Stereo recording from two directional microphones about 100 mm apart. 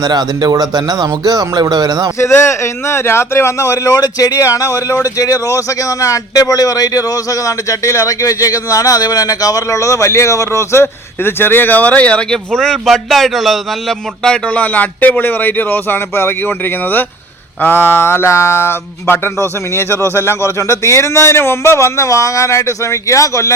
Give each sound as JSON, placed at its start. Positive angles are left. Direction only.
{"t": 0.0, "sound": "speech", "side_deg": -45}
{"t": 2.1, "sound": "a man's voice", "side_deg": 30}